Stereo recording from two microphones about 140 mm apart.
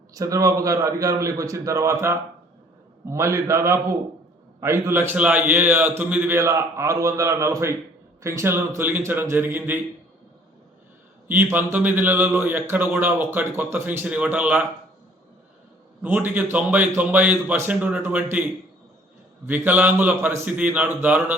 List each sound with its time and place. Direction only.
0.1 s a man's voice: 25° right (ahead or behind)
11.3 s a man's voice: 15° right (ahead or behind)
16.0 s a man's voice: 10° right (ahead or behind)
19.5 s a man's voice: 15° right (ahead or behind)